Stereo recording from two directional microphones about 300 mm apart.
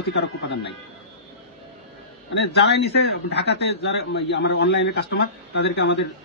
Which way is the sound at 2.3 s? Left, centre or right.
Left.